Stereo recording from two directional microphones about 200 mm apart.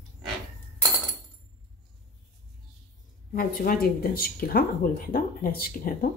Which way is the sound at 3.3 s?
45° left (ahead or behind).